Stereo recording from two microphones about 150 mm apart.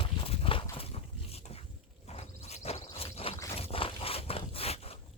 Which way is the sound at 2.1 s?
45° left (ahead or behind).